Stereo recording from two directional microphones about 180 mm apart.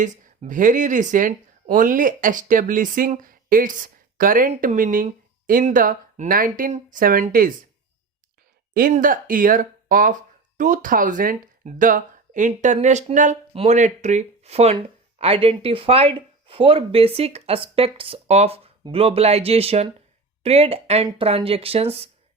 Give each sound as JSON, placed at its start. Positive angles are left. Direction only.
{"t": 0.0, "sound": "speech", "side_deg": -45}
{"t": 8.7, "sound": "speech", "side_deg": -50}